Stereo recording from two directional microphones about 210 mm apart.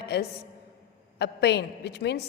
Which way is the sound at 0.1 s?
55° left (ahead or behind).